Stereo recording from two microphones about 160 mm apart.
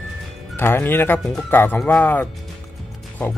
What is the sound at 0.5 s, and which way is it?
A man's voice, 15° left (ahead or behind).